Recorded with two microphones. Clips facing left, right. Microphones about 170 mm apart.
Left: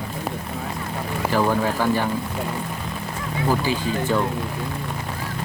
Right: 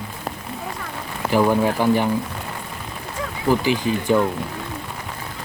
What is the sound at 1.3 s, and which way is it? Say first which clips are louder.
Speech: right 4 dB; 15° right (ahead or behind).